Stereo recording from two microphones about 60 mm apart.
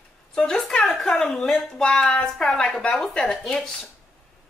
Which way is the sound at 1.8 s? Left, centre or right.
Centre.